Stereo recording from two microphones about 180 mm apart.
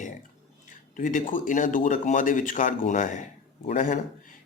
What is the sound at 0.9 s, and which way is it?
A man's voice, 45° left (ahead or behind).